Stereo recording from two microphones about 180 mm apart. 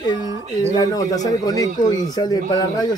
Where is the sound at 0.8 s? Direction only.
20° left (ahead or behind).